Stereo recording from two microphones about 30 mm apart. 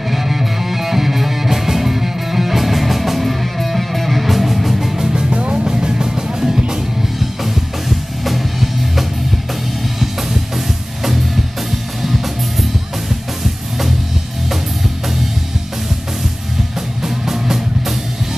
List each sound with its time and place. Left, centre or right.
0.1 s music: centre
4.9 s music: centre
5.3 s music: right
5.7 s music: right
7.9 s music: centre
12.0 s music: centre
17.0 s music: centre